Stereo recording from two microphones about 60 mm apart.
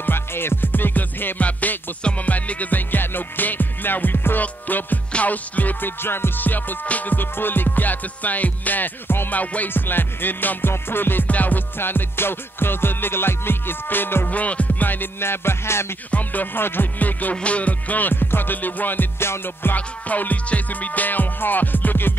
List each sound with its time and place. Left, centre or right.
0.0 s music: left
14.3 s music: left
16.1 s music: left